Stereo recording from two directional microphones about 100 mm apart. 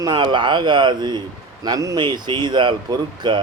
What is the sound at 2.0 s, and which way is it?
Speech, 50° right (ahead or behind).